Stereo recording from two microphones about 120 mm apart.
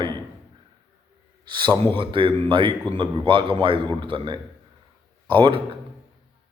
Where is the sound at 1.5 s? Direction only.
40° right (ahead or behind).